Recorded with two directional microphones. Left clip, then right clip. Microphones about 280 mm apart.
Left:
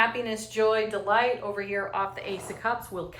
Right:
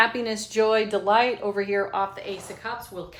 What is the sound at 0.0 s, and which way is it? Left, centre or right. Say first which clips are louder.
A woman's voice: right 3 dB; centre.